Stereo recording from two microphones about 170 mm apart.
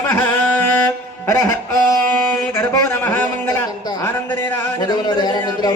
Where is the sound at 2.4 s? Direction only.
10° left (ahead or behind).